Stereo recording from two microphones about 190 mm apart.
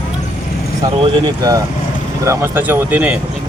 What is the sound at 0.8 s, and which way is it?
Speech, 20° right (ahead or behind).